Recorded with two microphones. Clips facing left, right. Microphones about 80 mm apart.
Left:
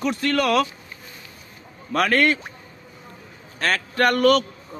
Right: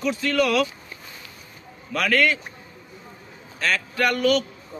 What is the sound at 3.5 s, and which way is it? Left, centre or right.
Speech, left.